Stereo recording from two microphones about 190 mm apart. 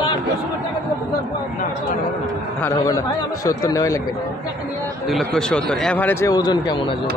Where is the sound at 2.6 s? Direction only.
15° left (ahead or behind).